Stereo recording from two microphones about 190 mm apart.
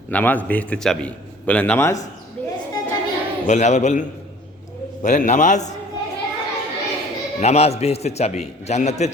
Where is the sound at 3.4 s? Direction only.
40° left (ahead or behind).